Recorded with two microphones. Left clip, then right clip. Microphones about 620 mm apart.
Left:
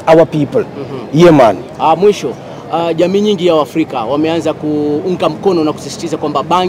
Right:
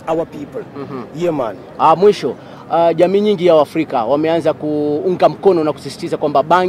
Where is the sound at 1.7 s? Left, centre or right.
Right.